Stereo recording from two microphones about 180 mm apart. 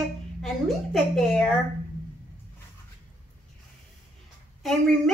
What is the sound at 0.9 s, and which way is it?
Speech, centre (ahead or behind).